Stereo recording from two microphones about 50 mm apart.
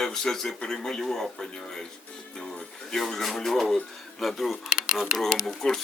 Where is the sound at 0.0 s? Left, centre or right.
Centre.